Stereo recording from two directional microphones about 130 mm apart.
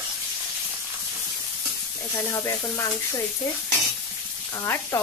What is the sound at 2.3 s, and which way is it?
Speech, 25° left (ahead or behind).